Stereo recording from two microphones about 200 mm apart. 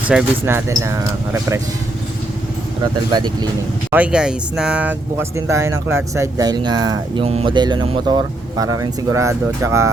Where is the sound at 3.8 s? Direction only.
5° right (ahead or behind).